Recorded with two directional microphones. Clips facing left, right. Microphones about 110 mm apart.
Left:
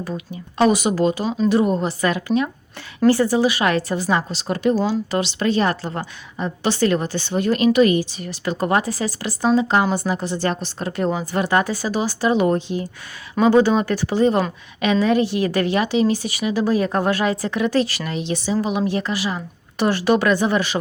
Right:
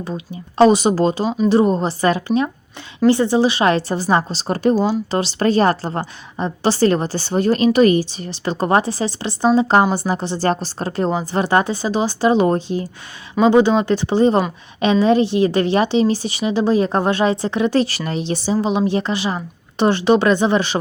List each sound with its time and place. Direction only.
0.6 s a woman's voice: 30° right (ahead or behind)
4.7 s speech: 15° right (ahead or behind)
5.1 s a woman's voice: 35° right (ahead or behind)
13.4 s speech: 20° right (ahead or behind)